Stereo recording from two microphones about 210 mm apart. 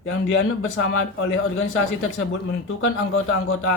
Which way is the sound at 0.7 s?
70° left (ahead or behind).